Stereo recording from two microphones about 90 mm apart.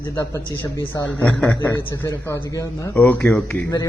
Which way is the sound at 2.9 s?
15° left (ahead or behind).